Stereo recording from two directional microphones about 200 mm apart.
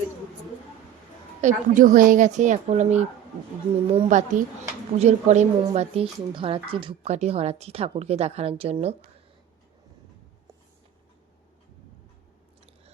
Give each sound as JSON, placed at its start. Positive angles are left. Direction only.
{"t": 1.4, "sound": "speech", "side_deg": -40}